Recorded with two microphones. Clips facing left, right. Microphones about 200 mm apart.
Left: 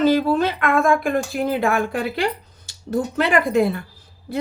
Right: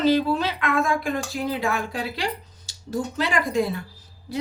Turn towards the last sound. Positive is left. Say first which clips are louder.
# left 4 dB
turn(degrees=55)  # may be behind; listen again after turning